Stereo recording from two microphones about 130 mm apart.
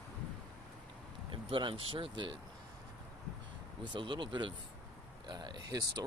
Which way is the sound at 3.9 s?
40° right (ahead or behind).